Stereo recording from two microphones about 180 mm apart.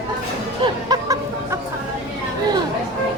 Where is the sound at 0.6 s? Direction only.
20° right (ahead or behind).